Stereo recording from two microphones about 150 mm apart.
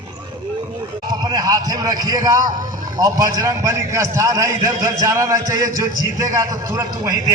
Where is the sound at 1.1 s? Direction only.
25° right (ahead or behind).